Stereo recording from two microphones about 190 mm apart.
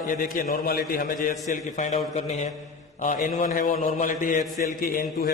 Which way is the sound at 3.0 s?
45° left (ahead or behind).